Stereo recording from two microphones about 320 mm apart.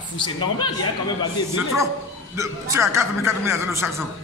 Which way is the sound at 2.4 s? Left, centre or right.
Centre.